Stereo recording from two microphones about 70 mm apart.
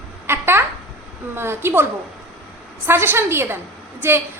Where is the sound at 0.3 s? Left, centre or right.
Right.